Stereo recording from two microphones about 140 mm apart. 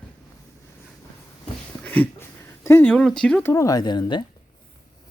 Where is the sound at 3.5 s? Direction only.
25° left (ahead or behind).